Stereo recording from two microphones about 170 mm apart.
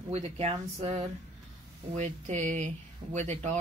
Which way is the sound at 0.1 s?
40° right (ahead or behind).